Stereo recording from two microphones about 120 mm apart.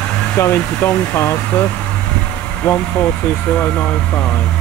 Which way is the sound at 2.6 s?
15° left (ahead or behind).